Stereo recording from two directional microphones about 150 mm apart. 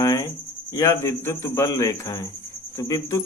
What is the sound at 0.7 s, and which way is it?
Speech, 20° left (ahead or behind).